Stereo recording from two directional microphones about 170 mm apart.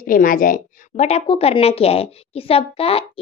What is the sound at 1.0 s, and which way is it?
A woman's voice, 35° left (ahead or behind).